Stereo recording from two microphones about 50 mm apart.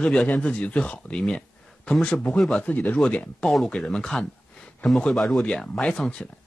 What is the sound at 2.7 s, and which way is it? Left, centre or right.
Speech, left.